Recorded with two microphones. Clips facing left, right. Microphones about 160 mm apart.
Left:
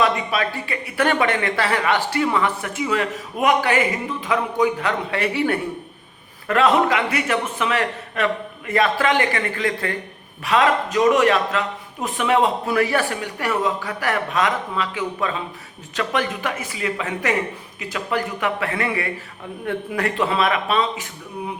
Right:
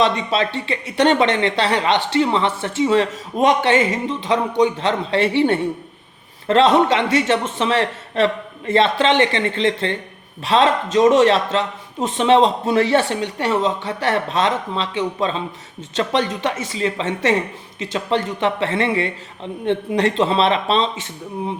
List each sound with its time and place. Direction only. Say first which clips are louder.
0.0 s speech: right 2 dB; 25° right (ahead or behind)